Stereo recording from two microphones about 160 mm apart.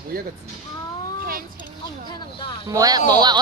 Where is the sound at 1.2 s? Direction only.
65° right (ahead or behind).